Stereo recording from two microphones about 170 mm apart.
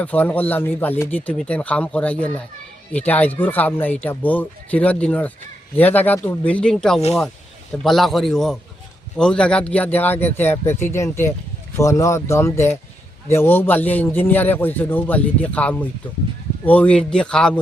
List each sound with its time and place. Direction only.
0.0 s a man's voice: 10° left (ahead or behind)